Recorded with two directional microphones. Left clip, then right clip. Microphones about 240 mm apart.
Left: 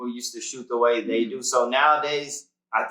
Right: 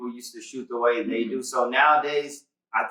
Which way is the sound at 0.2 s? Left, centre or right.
Centre.